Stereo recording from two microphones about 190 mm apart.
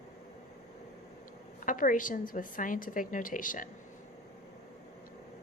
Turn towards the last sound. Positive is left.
turn(degrees=45)  # may be behind; listen again after turning